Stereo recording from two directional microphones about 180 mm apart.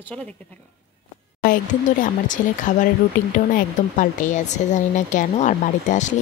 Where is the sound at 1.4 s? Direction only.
50° left (ahead or behind).